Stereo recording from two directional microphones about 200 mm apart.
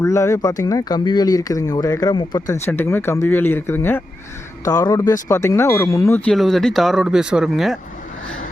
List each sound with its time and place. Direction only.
0.0 s speech: 15° left (ahead or behind)